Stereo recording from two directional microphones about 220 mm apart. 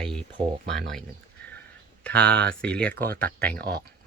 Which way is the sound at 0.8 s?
Centre (ahead or behind).